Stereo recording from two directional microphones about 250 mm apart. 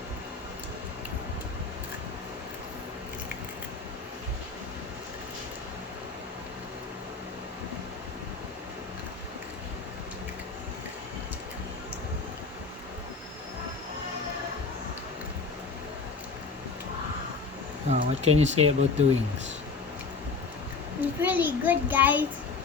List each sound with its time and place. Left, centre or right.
17.8 s speech: right
21.2 s a child's voice: centre